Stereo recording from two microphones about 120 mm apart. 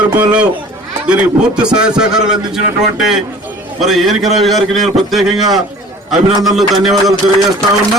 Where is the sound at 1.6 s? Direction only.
5° right (ahead or behind).